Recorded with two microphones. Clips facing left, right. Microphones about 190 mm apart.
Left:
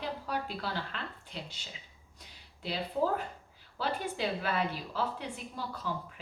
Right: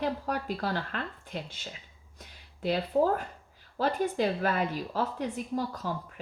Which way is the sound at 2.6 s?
50° right (ahead or behind).